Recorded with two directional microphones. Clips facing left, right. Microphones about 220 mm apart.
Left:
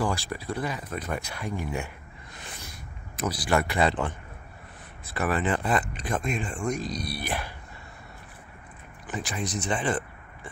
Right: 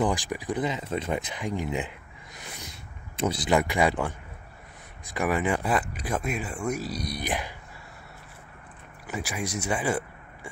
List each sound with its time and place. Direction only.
0.0 s speech: 15° right (ahead or behind)
2.4 s a sound: 20° right (ahead or behind)
5.0 s speech: 10° right (ahead or behind)
9.0 s speech: 10° right (ahead or behind)